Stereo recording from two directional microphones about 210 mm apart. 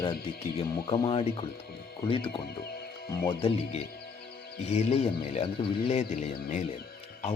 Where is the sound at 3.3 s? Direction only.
25° left (ahead or behind).